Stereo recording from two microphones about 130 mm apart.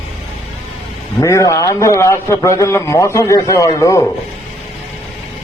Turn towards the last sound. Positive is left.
turn(degrees=25)  # may be behind; listen again after turning